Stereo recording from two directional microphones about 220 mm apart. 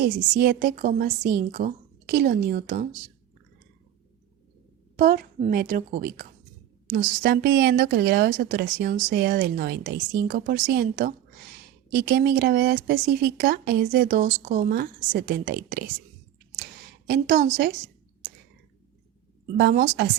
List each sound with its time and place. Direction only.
0.0 s a woman's voice: 45° right (ahead or behind)
4.9 s a woman's voice: 35° right (ahead or behind)
17.1 s a woman's voice: 40° right (ahead or behind)
19.5 s a woman's voice: 45° right (ahead or behind)